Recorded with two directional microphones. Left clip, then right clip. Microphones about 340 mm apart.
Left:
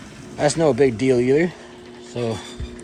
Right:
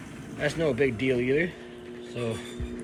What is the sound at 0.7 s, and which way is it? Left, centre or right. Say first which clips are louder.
Speech: left 8 dB; left.